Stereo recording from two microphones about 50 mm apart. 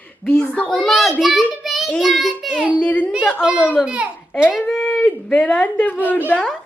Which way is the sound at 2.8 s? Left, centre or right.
Left.